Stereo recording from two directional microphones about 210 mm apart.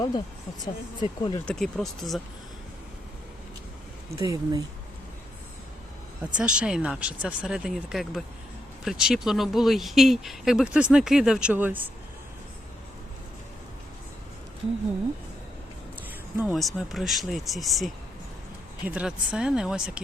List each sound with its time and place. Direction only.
0.6 s speech: 20° left (ahead or behind)
1.5 s speech: centre (ahead or behind)
4.2 s speech: 15° right (ahead or behind)
6.3 s speech: 5° right (ahead or behind)
16.4 s speech: centre (ahead or behind)